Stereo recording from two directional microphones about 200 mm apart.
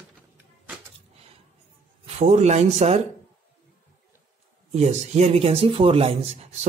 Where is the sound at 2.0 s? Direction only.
35° right (ahead or behind).